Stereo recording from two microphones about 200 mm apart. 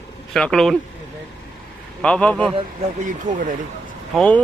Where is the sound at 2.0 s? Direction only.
5° left (ahead or behind).